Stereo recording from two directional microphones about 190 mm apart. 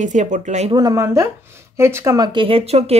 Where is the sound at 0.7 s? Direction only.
15° right (ahead or behind).